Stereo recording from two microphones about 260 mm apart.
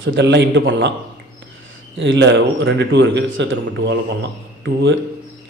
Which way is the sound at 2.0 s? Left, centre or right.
Right.